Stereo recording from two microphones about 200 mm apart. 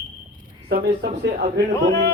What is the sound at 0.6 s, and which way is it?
Speech, 45° right (ahead or behind).